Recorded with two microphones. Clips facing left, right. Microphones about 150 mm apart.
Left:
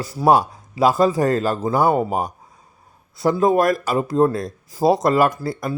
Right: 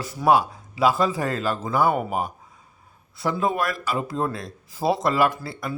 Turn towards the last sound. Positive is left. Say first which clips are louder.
# left 6 dB
turn(degrees=40)  # may be behind; listen again after turning